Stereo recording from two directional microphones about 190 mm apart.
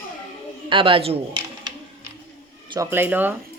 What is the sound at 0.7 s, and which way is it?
Speech, 25° right (ahead or behind).